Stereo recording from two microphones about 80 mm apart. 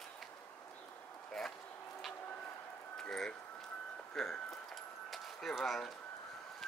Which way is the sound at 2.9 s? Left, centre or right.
Centre.